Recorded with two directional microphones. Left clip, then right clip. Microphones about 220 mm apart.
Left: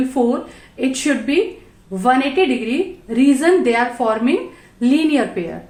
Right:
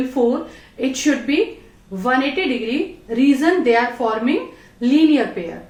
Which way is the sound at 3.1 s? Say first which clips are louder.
Left 2 dB; 45° left (ahead or behind).